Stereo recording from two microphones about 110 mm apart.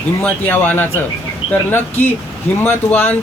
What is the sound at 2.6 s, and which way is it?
Speech, 20° left (ahead or behind).